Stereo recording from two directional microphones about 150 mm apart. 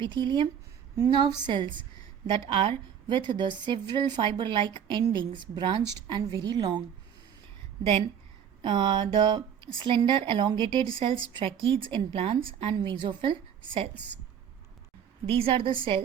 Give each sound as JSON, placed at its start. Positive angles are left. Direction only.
{"t": 0.0, "sound": "a woman's voice", "side_deg": -30}
{"t": 8.6, "sound": "a woman's voice", "side_deg": -30}
{"t": 15.3, "sound": "a woman's voice", "side_deg": -35}